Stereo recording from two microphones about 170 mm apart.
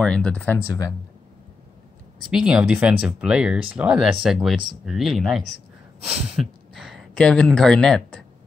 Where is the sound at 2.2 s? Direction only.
5° right (ahead or behind).